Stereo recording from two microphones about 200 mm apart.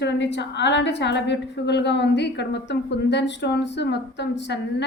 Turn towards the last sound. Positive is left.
turn(degrees=60)  # may be behind; listen again after turning